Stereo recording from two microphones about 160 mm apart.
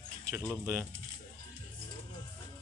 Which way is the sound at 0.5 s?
15° right (ahead or behind).